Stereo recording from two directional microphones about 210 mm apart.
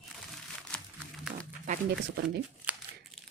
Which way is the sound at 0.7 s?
5° left (ahead or behind).